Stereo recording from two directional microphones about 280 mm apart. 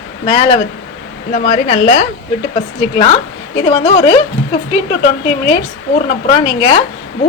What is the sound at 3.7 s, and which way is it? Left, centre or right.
Speech, centre.